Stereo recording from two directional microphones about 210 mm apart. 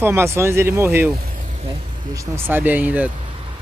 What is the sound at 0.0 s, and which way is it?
Speech, 10° right (ahead or behind).